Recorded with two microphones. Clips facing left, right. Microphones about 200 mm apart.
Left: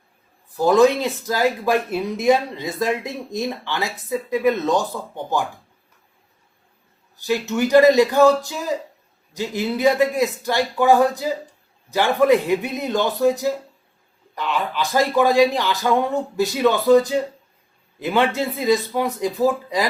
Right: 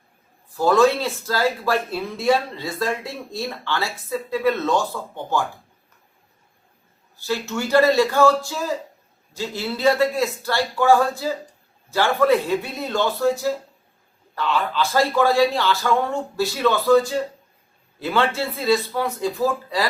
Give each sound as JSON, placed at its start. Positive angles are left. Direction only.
{"t": 0.5, "sound": "speech", "side_deg": 15}
{"t": 7.2, "sound": "speech", "side_deg": 15}